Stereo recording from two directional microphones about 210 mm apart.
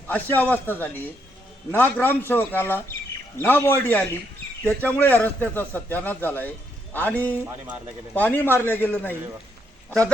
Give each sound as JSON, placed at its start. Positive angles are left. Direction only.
{"t": 0.1, "sound": "speech", "side_deg": 10}